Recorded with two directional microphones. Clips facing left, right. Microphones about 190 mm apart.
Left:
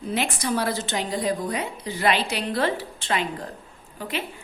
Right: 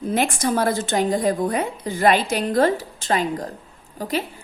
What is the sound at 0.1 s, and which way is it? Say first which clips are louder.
A woman's voice: right 4 dB; 45° right (ahead or behind).